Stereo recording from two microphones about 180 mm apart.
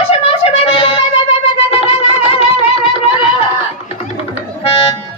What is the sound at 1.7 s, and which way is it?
Music, 35° left (ahead or behind).